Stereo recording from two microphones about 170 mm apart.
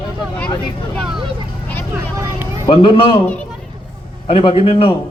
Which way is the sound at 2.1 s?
20° right (ahead or behind).